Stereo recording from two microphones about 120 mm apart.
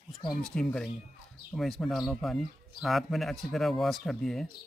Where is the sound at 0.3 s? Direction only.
5° left (ahead or behind).